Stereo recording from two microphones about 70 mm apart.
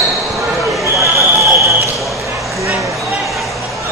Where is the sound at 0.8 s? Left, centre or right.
Right.